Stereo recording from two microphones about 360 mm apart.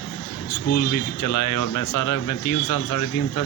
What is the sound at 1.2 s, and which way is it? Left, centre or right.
Speech, left.